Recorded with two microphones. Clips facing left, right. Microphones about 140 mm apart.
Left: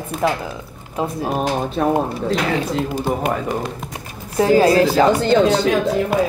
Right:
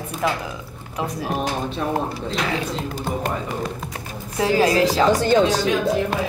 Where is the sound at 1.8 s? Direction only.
60° left (ahead or behind).